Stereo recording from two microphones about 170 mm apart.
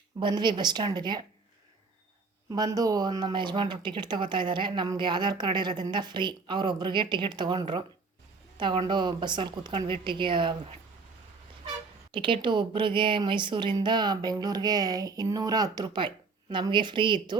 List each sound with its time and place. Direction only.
0.2 s speech: 25° right (ahead or behind)
2.5 s speech: 20° right (ahead or behind)
12.1 s speech: 30° right (ahead or behind)